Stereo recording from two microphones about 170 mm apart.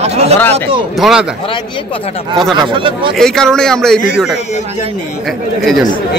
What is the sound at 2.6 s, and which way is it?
Speech, 30° right (ahead or behind).